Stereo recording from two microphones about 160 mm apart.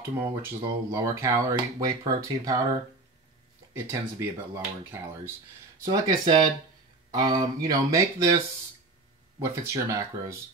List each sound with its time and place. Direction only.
0.2 s speech: 15° right (ahead or behind)
6.0 s speech: 25° right (ahead or behind)
9.4 s speech: 15° right (ahead or behind)